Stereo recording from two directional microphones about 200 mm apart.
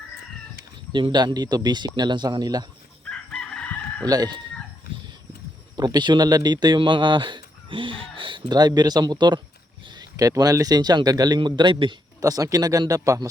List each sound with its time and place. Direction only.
0.9 s speech: 20° right (ahead or behind)
3.0 s chicken: 5° left (ahead or behind)
4.0 s speech: 20° right (ahead or behind)
4.9 s dog: 50° left (ahead or behind)
5.7 s speech: 20° right (ahead or behind)